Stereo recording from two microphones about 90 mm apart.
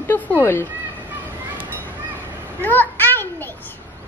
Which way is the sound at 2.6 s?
20° left (ahead or behind).